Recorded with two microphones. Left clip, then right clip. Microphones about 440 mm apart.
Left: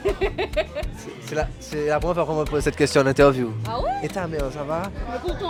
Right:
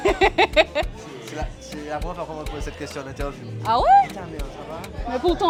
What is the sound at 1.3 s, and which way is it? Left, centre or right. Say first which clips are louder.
Speech: left 8 dB; left.